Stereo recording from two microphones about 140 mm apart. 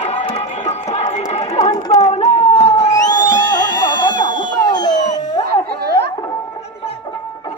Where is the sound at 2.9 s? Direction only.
25° left (ahead or behind).